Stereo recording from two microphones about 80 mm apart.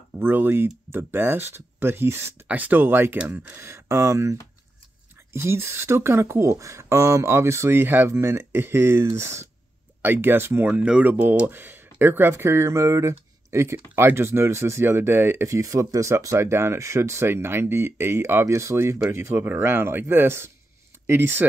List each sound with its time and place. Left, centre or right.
0.2 s speech: right
2.4 s speech: centre
10.6 s speech: centre